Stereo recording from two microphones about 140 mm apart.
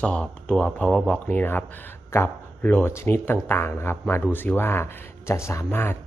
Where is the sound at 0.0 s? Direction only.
5° left (ahead or behind).